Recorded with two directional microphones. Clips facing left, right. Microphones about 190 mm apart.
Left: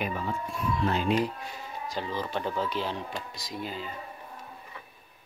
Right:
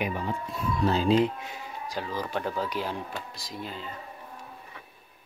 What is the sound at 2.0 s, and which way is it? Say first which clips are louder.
Speech: right 1 dB; 5° right (ahead or behind).